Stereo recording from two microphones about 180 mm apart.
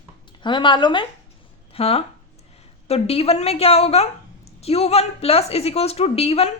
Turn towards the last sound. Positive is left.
turn(degrees=35)  # may be behind; listen again after turning